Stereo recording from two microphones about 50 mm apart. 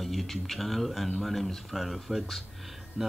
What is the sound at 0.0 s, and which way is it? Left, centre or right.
Speech, centre.